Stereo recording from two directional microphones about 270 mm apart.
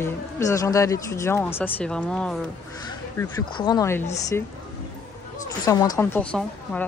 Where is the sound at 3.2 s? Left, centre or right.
Centre.